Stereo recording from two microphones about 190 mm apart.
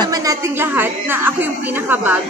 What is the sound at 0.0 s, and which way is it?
Speech, 20° right (ahead or behind).